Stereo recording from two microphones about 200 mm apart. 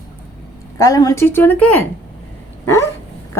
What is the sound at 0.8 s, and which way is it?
A woman's voice, 15° left (ahead or behind).